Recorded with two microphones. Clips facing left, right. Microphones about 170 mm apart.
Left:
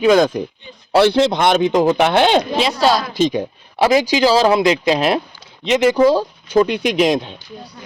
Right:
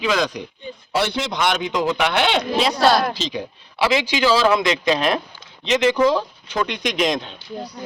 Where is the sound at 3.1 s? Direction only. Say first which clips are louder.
Left 10 dB; 50° left (ahead or behind); by 7.3 s 30° left (ahead or behind).